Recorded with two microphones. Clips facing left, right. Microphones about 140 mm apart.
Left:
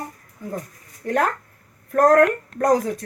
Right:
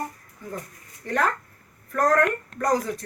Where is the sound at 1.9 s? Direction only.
50° left (ahead or behind).